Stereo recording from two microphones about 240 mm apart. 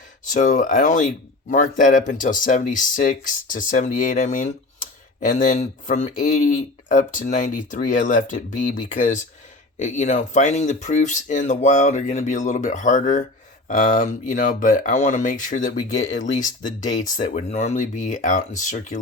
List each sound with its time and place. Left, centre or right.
0.3 s speech: left
15.7 s speech: centre
17.2 s speech: left